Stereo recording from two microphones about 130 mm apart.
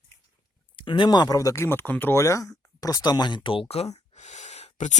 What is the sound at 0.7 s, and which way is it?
Speech, 40° left (ahead or behind).